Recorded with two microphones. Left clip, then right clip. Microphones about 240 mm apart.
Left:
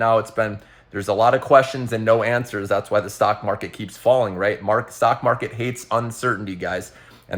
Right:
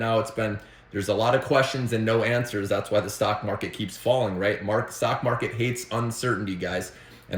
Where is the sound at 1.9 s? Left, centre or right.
Left.